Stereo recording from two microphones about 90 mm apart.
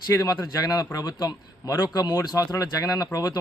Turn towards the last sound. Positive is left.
turn(degrees=40)  # may be behind; listen again after turning